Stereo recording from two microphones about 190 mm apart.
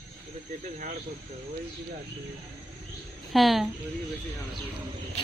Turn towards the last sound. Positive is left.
turn(degrees=0)  # may be behind; listen again after turning